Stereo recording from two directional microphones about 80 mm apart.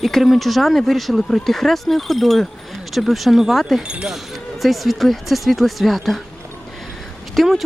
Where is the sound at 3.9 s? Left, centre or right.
Centre.